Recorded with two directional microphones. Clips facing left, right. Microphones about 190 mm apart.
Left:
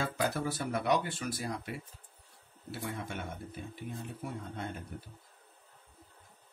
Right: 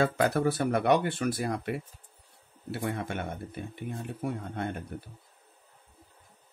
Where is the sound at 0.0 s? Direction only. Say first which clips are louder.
Right 8 dB; 60° right (ahead or behind).